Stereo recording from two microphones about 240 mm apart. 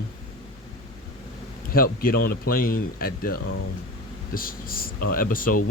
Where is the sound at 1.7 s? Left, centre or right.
Left.